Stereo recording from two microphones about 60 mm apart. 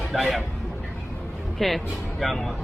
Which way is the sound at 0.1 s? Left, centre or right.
Centre.